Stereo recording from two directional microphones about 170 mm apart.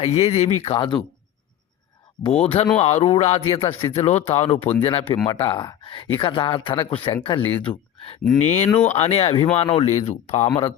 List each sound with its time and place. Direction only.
0.0 s speech: 35° left (ahead or behind)
2.4 s speech: 35° left (ahead or behind)
7.5 s speech: 10° left (ahead or behind)
8.4 s speech: 40° left (ahead or behind)